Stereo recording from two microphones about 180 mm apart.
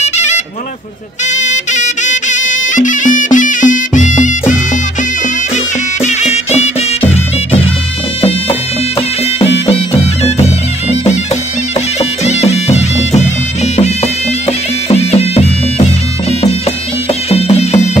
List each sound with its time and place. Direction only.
0.0 s a sound: 40° left (ahead or behind)
1.3 s music: 40° left (ahead or behind)
6.0 s music: 35° left (ahead or behind)
8.2 s bagpipes: 30° left (ahead or behind)
12.0 s bagpipes: 35° left (ahead or behind)
13.7 s music: 40° left (ahead or behind)